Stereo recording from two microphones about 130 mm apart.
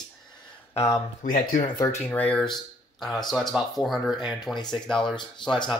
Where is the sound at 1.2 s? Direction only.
80° left.